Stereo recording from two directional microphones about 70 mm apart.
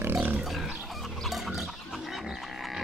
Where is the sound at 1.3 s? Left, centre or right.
Centre.